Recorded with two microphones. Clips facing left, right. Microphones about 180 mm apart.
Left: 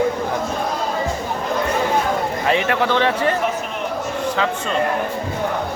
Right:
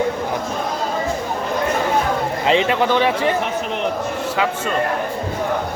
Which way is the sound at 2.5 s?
20° right (ahead or behind).